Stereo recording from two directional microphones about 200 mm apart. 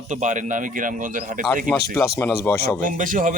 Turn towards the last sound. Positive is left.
turn(degrees=-40)  # may be behind; listen again after turning